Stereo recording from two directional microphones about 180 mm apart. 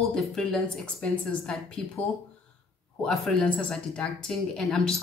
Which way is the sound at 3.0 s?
5° left (ahead or behind).